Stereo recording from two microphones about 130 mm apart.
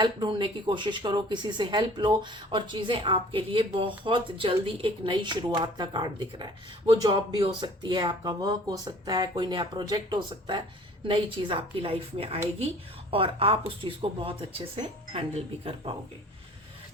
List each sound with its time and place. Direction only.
0.0 s speech: 35° right (ahead or behind)